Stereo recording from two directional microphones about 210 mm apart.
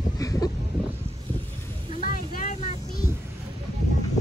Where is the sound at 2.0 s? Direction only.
35° left (ahead or behind).